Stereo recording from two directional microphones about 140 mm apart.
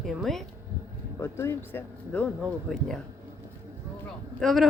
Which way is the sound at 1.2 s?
20° left (ahead or behind).